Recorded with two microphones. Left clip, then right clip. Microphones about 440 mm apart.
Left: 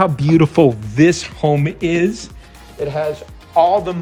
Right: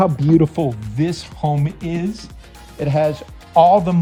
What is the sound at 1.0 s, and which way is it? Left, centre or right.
Speech, centre.